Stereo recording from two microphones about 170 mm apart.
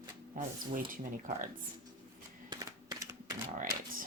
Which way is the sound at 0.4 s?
55° right (ahead or behind).